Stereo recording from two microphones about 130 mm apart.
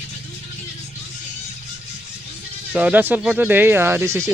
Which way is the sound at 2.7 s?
10° right (ahead or behind).